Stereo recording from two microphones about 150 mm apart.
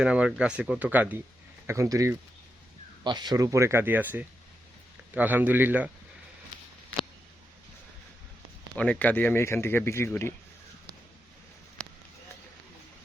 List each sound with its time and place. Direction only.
0.0 s speech: 5° right (ahead or behind)
8.7 s speech: 10° left (ahead or behind)